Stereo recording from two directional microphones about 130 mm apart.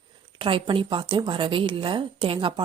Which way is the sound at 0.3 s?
40° right (ahead or behind).